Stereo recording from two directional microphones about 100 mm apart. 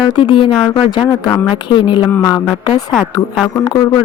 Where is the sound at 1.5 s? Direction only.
50° left (ahead or behind).